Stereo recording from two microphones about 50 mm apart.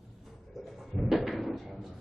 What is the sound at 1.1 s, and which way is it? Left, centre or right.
Cupboard open or close, centre.